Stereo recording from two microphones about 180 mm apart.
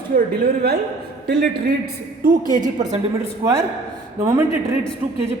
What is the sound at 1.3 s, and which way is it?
Speech, 65° right (ahead or behind).